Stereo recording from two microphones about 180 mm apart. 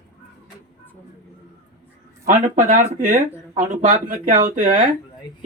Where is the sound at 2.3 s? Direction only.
45° right (ahead or behind).